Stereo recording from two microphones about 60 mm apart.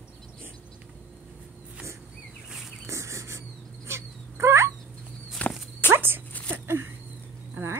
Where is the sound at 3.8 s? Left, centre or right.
Right.